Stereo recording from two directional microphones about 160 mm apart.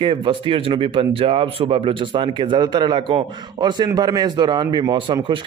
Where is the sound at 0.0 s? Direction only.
30° right (ahead or behind).